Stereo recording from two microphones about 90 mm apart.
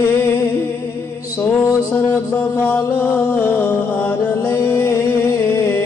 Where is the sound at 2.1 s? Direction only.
25° left (ahead or behind).